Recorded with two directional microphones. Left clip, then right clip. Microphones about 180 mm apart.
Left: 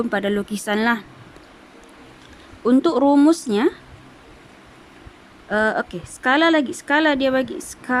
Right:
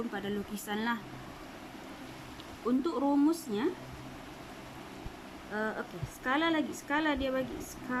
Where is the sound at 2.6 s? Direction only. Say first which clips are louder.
Left 15 dB; 60° left (ahead or behind).